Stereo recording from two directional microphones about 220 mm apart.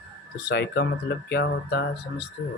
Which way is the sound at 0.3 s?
50° left (ahead or behind).